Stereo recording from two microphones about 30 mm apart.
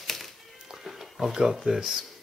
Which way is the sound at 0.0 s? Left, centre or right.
Centre.